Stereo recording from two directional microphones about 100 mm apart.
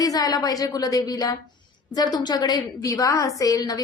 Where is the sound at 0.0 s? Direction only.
40° left (ahead or behind).